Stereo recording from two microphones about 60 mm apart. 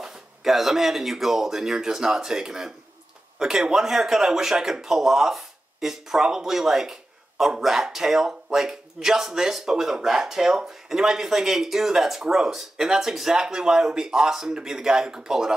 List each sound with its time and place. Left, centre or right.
0.0 s speech: centre